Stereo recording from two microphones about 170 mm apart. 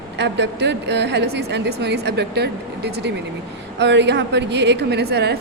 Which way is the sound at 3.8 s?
90° right.